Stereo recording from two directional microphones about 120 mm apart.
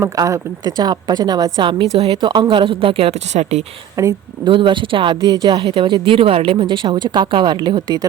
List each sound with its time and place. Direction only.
0.0 s speech: 25° right (ahead or behind)
1.5 s a woman's voice: 45° right (ahead or behind); by 3.6 s 65° right (ahead or behind)
4.0 s a woman's voice: 30° right (ahead or behind)
4.4 s a woman's voice: 40° right (ahead or behind)
5.3 s speech: 30° right (ahead or behind)
5.5 s speech: 50° right (ahead or behind)